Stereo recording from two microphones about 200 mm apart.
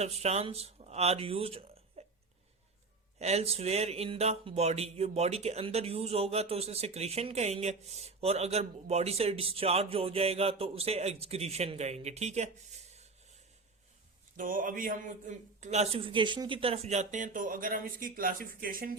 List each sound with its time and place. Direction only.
0.0 s speech: 35° right (ahead or behind)
3.2 s speech: 30° right (ahead or behind)
14.3 s speech: 40° right (ahead or behind)